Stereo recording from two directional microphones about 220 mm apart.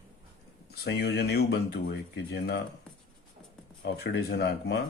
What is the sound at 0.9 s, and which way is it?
A man's voice, 50° left (ahead or behind).